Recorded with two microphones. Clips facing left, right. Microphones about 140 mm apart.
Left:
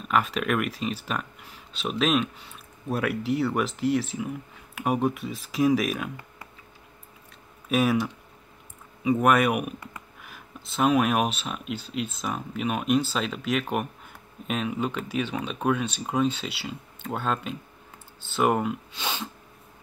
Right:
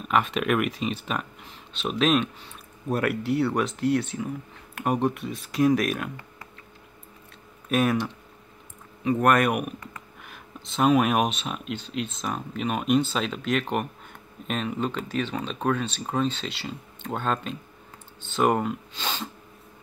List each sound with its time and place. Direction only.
0.1 s speech: centre (ahead or behind)
7.7 s speech: 5° left (ahead or behind)